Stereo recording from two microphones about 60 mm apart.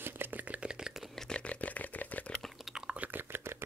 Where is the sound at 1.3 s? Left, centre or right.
Left.